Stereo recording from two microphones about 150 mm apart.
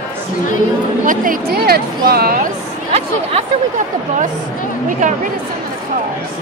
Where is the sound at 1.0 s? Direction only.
65° right (ahead or behind); by 2.4 s 85° right.